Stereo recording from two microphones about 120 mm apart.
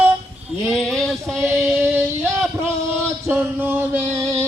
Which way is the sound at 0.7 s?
5° left (ahead or behind).